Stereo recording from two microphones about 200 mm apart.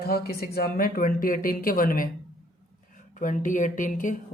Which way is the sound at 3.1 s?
40° left (ahead or behind).